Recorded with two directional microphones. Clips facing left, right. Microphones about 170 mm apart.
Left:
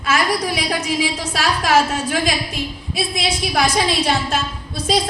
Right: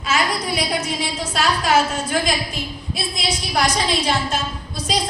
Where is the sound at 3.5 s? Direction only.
60° left (ahead or behind).